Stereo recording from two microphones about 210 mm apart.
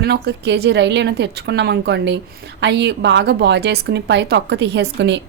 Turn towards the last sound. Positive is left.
turn(degrees=-55)  # may be behind; listen again after turning